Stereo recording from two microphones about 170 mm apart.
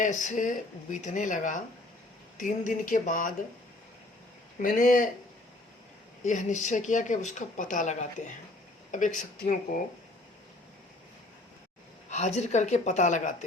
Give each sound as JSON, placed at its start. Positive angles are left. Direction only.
{"t": 0.0, "sound": "speech", "side_deg": 45}
{"t": 4.6, "sound": "speech", "side_deg": 55}
{"t": 6.2, "sound": "speech", "side_deg": 45}
{"t": 12.1, "sound": "speech", "side_deg": 40}